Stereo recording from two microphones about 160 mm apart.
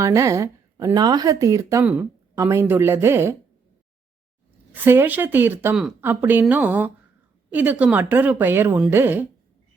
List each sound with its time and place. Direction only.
0.0 s a woman's voice: 20° right (ahead or behind)
4.7 s a woman's voice: 15° right (ahead or behind)